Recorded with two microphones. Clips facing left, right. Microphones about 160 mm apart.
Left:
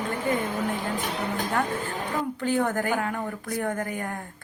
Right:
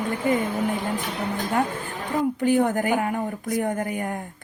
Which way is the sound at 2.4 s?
15° right (ahead or behind).